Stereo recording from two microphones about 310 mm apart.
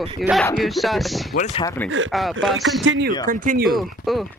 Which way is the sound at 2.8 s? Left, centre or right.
Right.